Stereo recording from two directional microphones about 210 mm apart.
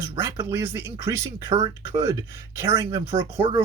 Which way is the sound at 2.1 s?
15° right (ahead or behind).